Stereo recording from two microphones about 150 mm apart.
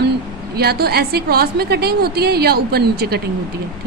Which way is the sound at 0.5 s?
90° right.